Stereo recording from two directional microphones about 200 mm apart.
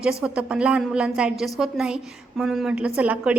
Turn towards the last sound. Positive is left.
turn(degrees=-5)  # may be behind; listen again after turning